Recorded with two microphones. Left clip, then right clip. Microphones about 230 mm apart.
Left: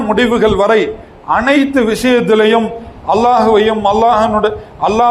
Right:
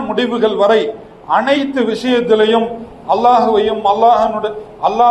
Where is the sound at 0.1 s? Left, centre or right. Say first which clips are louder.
Left 4 dB; left.